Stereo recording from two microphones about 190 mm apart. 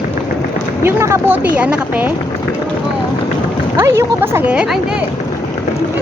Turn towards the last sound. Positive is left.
turn(degrees=-5)  # may be behind; listen again after turning